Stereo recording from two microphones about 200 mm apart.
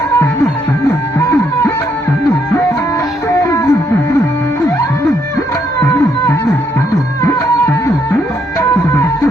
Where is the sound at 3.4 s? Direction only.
15° left (ahead or behind).